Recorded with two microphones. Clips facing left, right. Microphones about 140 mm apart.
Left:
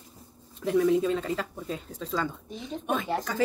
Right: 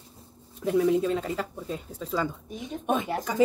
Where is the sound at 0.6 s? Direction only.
5° right (ahead or behind).